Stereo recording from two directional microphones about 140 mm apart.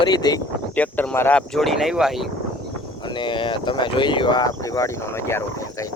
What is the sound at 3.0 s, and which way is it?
Speech, 35° left (ahead or behind).